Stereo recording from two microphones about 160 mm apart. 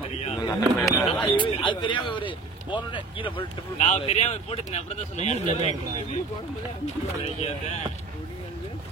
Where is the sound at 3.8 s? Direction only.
45° left (ahead or behind).